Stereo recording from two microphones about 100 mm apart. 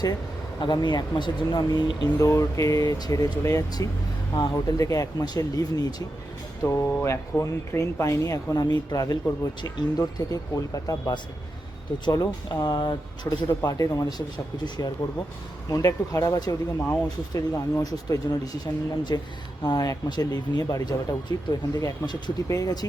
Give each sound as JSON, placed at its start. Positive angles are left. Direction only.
{"t": 0.6, "sound": "speech", "side_deg": 45}
{"t": 13.7, "sound": "speech", "side_deg": 35}